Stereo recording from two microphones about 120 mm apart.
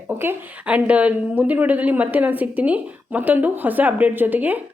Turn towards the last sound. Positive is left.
turn(degrees=-15)  # may be behind; listen again after turning